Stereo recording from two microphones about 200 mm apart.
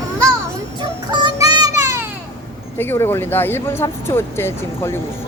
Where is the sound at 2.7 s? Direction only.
10° left (ahead or behind).